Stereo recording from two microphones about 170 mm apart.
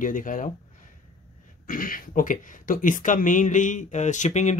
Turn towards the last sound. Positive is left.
turn(degrees=45)  # may be behind; listen again after turning